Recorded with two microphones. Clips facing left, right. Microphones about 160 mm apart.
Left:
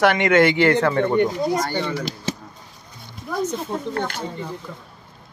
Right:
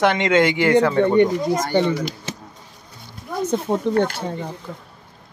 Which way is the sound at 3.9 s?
60° right (ahead or behind).